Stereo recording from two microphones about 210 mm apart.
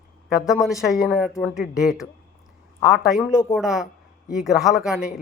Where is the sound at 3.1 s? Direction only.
Centre (ahead or behind).